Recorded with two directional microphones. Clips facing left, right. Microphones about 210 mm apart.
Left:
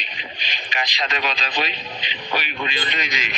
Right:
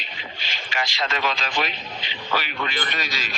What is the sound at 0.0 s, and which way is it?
Speech, 20° left (ahead or behind).